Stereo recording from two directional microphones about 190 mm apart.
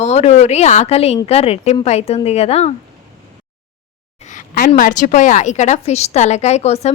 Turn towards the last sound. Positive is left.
turn(degrees=35)  # may be behind; listen again after turning